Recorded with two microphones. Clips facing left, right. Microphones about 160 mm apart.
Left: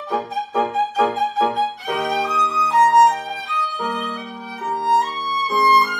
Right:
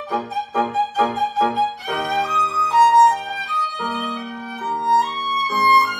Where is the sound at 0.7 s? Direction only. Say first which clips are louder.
Left 1 dB; centre (ahead or behind).